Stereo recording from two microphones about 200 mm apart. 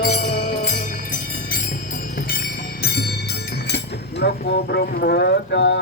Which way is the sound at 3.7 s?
55° left (ahead or behind).